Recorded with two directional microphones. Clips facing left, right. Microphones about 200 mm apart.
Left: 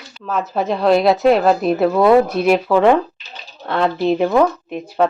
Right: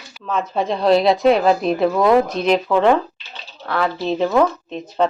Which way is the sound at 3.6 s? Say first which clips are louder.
Left 4 dB; 25° left (ahead or behind).